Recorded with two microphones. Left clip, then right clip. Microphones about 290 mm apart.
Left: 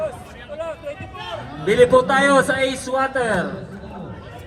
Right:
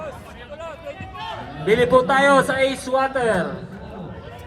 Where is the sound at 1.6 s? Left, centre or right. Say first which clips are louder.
Left 2 dB; right.